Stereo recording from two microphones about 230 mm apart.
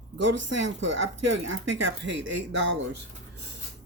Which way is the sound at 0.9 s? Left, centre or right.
Right.